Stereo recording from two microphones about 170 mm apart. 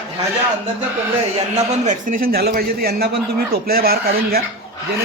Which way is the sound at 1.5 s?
45° right (ahead or behind).